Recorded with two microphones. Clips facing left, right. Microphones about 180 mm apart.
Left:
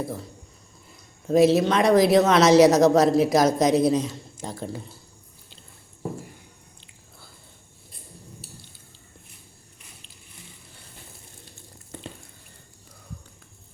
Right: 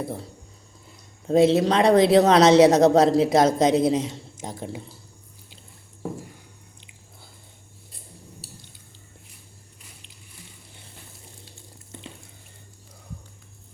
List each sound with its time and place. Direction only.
0.0 s speech: 30° right (ahead or behind)
1.3 s speech: 30° right (ahead or behind)